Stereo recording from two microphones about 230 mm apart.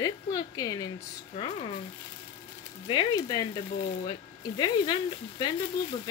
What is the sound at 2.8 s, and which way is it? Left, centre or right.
Speech, left.